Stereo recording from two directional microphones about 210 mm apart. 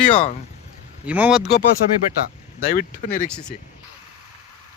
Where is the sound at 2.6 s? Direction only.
40° left (ahead or behind).